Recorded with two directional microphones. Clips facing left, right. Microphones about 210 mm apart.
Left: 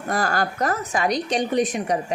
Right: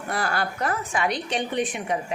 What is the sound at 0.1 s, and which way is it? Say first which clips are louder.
A woman's voice: left 4 dB; 45° left (ahead or behind).